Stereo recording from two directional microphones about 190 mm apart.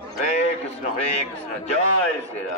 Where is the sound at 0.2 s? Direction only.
35° left (ahead or behind).